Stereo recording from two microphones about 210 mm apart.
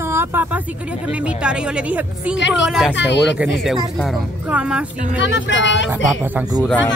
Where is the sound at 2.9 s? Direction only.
55° left (ahead or behind).